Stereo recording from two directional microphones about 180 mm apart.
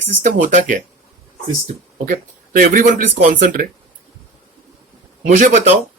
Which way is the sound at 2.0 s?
50° right (ahead or behind).